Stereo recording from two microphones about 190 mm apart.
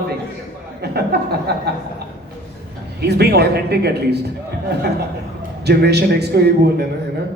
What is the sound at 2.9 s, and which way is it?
A man's voice, 60° right (ahead or behind).